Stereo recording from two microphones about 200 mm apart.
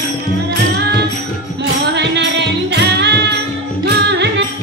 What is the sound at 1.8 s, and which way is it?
Music, 60° right (ahead or behind).